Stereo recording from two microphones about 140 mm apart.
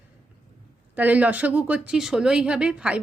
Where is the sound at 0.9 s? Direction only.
10° right (ahead or behind).